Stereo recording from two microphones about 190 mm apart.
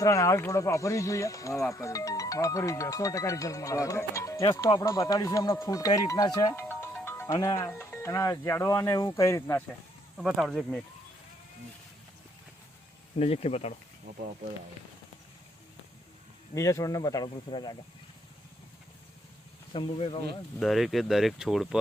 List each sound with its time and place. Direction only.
0.0 s speech: 15° left (ahead or behind)
10.2 s speech: centre (ahead or behind)
13.1 s speech: 30° left (ahead or behind)
16.6 s speech: 15° left (ahead or behind)
19.7 s speech: 25° left (ahead or behind)
20.6 s speech: centre (ahead or behind)